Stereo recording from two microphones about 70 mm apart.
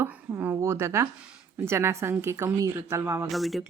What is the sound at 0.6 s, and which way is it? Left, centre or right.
A woman's voice, right.